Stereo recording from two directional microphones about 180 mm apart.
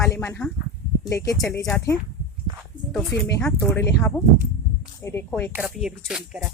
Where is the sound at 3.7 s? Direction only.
15° left (ahead or behind).